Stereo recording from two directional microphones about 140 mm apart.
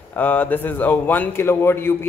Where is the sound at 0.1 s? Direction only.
15° left (ahead or behind).